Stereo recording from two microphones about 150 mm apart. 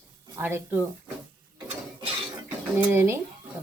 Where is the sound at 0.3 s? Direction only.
15° right (ahead or behind).